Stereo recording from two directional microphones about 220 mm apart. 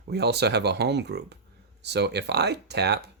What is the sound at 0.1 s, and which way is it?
Speech, 50° right (ahead or behind).